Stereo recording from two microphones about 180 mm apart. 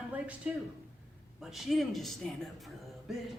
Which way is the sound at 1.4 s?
Centre (ahead or behind).